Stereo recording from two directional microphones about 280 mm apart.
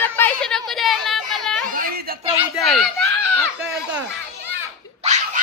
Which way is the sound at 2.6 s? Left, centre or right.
Centre.